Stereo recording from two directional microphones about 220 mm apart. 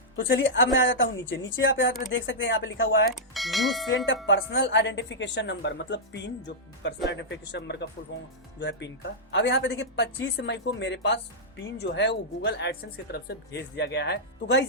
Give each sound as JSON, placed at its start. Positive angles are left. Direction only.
{"t": 0.2, "sound": "a woman's voice", "side_deg": 50}
{"t": 3.2, "sound": "speech", "side_deg": 0}
{"t": 4.3, "sound": "speech", "side_deg": 55}